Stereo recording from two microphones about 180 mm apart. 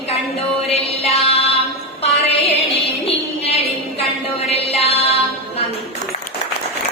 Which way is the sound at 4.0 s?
35° left (ahead or behind).